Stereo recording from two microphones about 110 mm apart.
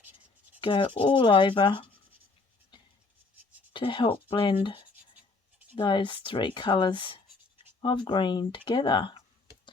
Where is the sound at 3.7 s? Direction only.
50° left (ahead or behind).